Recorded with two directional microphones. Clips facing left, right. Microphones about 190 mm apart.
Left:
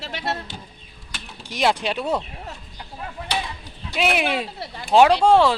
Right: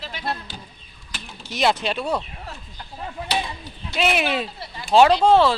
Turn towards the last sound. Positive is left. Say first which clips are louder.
# even
turn(degrees=10)  # may be behind; listen again after turning